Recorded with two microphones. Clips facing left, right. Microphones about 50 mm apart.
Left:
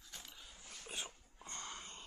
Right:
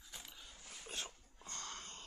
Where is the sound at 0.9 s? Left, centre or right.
Centre.